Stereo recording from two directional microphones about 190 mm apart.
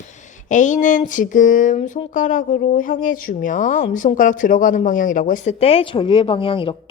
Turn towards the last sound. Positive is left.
turn(degrees=30)  # may be behind; listen again after turning